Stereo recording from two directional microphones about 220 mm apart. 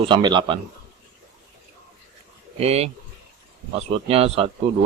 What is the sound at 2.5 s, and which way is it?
Speech, 30° right (ahead or behind).